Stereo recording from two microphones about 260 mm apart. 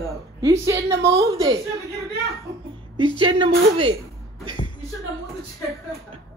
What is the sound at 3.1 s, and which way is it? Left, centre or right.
Speech, centre.